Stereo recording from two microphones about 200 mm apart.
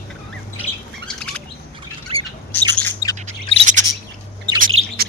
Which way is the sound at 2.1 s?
30° right (ahead or behind).